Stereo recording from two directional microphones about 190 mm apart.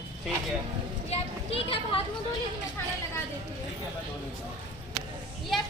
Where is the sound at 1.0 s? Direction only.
35° left (ahead or behind).